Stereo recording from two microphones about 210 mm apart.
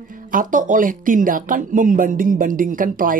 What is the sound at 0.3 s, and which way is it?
Speech, 40° right (ahead or behind).